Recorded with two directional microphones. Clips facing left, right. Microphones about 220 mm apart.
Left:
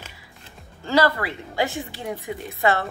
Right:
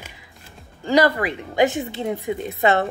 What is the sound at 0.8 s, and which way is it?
A woman's voice, 15° right (ahead or behind).